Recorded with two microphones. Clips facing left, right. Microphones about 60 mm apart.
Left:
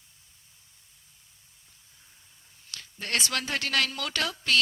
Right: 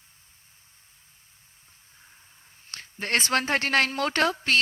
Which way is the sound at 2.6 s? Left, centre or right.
Right.